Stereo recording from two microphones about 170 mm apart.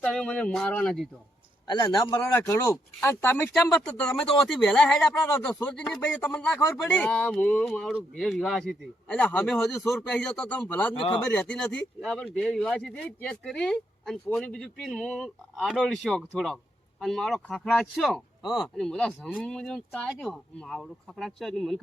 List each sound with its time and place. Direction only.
0.0 s speech: 5° left (ahead or behind)
1.6 s speech: 20° left (ahead or behind); by 21.8 s centre (ahead or behind)